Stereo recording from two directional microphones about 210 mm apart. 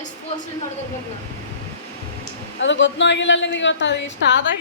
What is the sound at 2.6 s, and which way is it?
A woman's voice, 60° left (ahead or behind).